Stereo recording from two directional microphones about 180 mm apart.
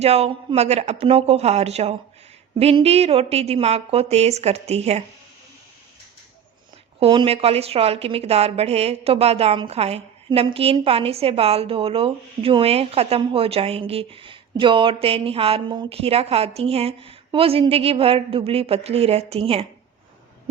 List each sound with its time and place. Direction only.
0.0 s a woman's voice: 35° right (ahead or behind)
7.0 s a woman's voice: 30° right (ahead or behind)